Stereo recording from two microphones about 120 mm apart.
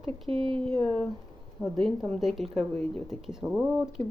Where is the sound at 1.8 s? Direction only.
5° left (ahead or behind).